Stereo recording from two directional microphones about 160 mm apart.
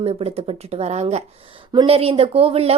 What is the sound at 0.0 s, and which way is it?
A woman's voice, 40° right (ahead or behind).